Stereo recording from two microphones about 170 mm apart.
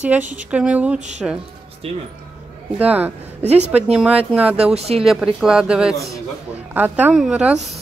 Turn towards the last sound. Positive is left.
turn(degrees=-5)  # may be behind; listen again after turning